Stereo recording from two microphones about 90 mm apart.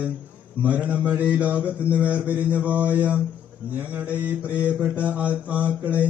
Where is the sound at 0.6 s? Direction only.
15° right (ahead or behind).